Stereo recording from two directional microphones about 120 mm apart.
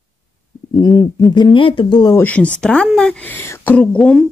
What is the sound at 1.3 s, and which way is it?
Speech, 40° left (ahead or behind).